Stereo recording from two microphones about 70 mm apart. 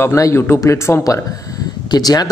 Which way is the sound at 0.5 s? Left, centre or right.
Left.